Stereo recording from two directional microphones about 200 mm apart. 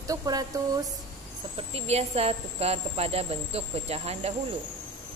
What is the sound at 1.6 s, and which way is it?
Speech, 30° right (ahead or behind).